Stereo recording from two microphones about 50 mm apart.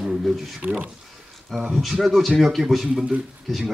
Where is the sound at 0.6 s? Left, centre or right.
Right.